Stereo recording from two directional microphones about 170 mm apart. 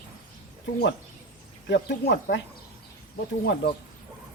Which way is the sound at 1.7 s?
80° left.